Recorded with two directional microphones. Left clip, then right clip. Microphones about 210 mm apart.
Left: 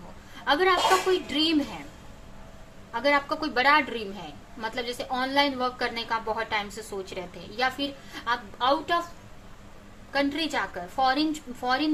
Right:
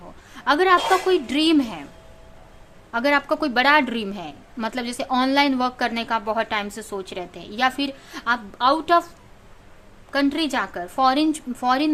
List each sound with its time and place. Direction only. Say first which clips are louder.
0.3 s a sound: right 6 dB; 40° right (ahead or behind)
1.3 s a woman's voice: right 5 dB; 40° right (ahead or behind)
2.9 s a woman's voice: right 4 dB; 40° right (ahead or behind)
10.1 s a woman's voice: right 5 dB; 45° right (ahead or behind)